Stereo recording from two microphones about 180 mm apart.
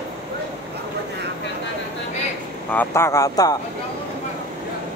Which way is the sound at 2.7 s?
10° left (ahead or behind).